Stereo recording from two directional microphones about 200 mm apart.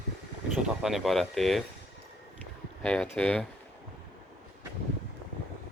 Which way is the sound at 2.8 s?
5° left (ahead or behind).